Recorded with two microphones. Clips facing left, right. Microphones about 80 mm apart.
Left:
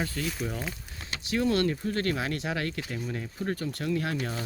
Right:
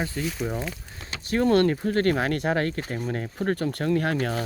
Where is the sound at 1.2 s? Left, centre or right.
Right.